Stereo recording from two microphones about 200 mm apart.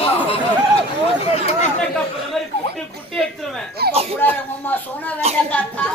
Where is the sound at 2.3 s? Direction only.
Centre (ahead or behind).